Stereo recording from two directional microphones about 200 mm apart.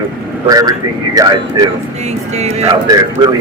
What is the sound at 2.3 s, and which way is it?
Speech, 35° right (ahead or behind).